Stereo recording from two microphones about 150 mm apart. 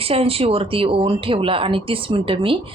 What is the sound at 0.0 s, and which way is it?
A woman's voice, 40° right (ahead or behind).